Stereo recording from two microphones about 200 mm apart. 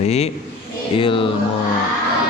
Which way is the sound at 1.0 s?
25° left (ahead or behind).